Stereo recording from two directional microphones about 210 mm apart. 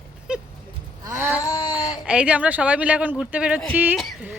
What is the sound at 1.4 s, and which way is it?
Speech, 20° left (ahead or behind).